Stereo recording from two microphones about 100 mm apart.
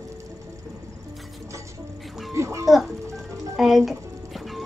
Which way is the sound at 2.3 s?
30° right (ahead or behind).